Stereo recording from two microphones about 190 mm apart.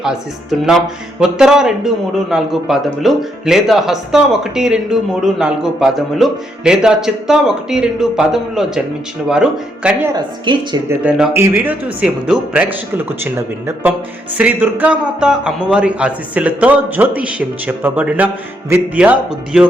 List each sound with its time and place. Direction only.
1.2 s a man's voice: 5° right (ahead or behind)
10.2 s a woman's voice: 25° right (ahead or behind)
10.8 s a man's voice: 10° right (ahead or behind)